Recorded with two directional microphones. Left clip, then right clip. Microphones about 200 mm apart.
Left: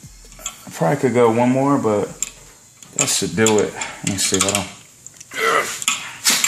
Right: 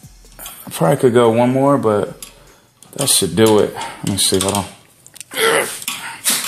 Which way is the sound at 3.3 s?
45° right (ahead or behind).